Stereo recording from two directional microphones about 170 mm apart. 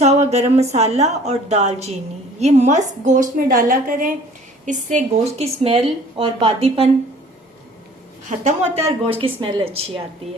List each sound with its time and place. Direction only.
0.0 s a woman's voice: 40° right (ahead or behind)
8.3 s a woman's voice: 40° right (ahead or behind)